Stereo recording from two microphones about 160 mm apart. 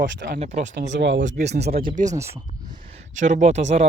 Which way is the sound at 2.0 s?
20° right (ahead or behind).